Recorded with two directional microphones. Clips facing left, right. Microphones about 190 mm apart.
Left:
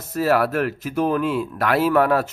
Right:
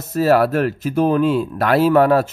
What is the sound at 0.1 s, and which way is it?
Speech, 30° right (ahead or behind).